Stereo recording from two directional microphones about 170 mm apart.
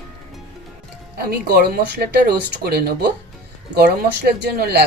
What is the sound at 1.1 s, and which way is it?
Speech, 65° right (ahead or behind).